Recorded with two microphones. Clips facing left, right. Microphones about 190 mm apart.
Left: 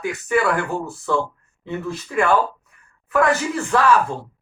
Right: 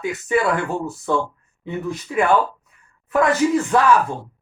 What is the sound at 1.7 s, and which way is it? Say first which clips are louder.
A woman's voice: right 1 dB; 15° right (ahead or behind).